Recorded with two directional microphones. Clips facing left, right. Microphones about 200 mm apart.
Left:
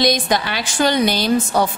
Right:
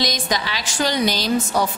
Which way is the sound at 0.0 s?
55° left (ahead or behind).